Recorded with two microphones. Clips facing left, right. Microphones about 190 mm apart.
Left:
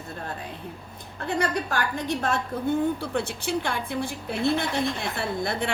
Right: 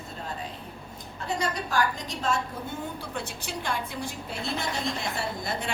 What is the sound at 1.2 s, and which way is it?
A woman's voice, 60° left (ahead or behind).